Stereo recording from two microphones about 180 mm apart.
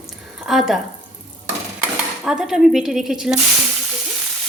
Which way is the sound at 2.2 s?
5° right (ahead or behind).